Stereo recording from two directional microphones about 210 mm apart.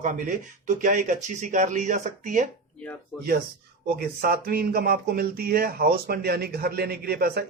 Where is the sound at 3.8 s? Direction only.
45° right (ahead or behind).